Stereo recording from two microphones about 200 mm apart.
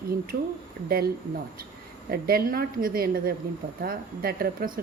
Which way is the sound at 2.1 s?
50° right (ahead or behind).